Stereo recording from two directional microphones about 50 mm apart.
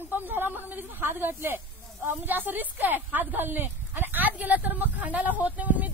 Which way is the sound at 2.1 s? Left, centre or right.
Right.